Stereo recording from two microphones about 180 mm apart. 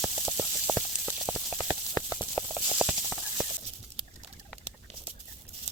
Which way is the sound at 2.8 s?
5° right (ahead or behind).